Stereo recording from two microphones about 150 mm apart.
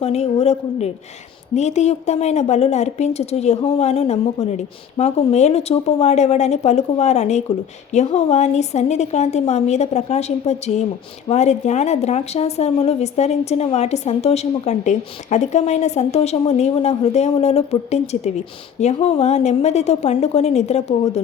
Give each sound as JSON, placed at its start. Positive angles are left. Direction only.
{"t": 0.0, "sound": "a woman's voice", "side_deg": 45}